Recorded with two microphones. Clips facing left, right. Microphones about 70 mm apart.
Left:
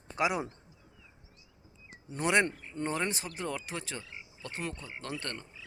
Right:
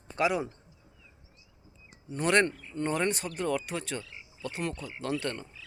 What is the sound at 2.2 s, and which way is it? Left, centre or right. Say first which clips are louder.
Speech: right 2 dB; centre.